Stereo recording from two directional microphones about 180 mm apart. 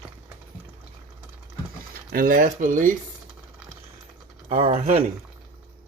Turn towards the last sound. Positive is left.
turn(degrees=-35)  # may be behind; listen again after turning